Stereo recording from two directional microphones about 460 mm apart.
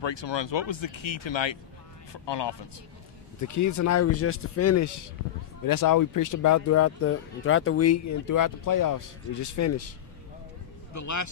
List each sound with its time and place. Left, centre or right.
0.0 s speech: left
3.3 s speech: left